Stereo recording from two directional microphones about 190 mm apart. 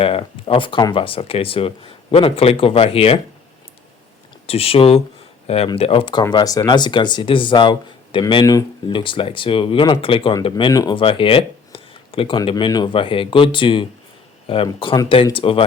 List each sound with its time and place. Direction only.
0.0 s speech: 30° left (ahead or behind)
4.4 s speech: 30° left (ahead or behind)